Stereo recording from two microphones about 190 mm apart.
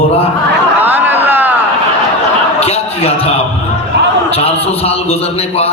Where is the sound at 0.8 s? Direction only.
10° right (ahead or behind).